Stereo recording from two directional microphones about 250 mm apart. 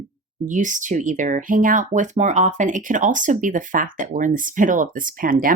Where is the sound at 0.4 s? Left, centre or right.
Right.